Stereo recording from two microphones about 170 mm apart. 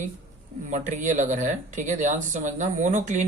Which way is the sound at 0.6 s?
45° right (ahead or behind).